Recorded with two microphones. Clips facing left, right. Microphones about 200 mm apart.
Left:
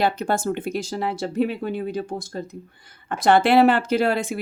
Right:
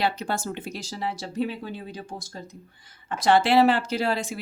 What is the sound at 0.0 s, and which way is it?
Speech, 50° left (ahead or behind).